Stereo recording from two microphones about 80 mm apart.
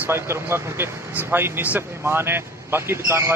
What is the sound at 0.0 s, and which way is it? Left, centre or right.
Speech, right.